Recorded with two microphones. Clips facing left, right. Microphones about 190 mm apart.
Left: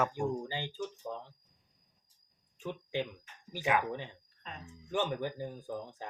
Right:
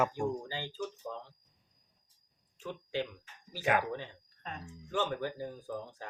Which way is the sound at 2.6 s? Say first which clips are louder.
Left 1 dB; 15° left (ahead or behind).